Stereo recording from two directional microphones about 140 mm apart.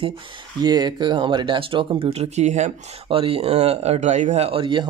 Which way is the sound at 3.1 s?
40° right (ahead or behind).